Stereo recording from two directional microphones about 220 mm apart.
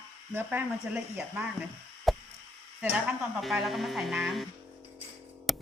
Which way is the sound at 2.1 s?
Centre (ahead or behind).